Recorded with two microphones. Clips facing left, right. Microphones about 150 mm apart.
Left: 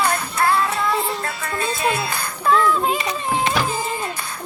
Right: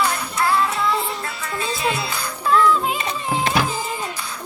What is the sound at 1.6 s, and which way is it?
Music, 50° left (ahead or behind).